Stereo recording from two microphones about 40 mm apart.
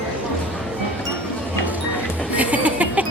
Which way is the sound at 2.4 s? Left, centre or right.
Right.